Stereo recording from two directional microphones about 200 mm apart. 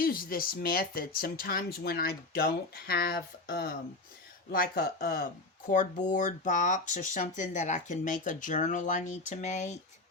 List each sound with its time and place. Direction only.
0.0 s speech: 45° left (ahead or behind)